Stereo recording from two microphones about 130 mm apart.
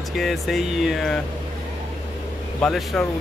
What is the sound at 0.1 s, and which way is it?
Speech, centre (ahead or behind).